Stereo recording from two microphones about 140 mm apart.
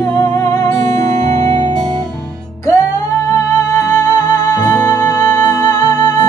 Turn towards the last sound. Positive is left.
turn(degrees=30)  # may be behind; listen again after turning